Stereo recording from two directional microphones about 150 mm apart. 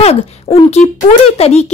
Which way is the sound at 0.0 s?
40° left (ahead or behind).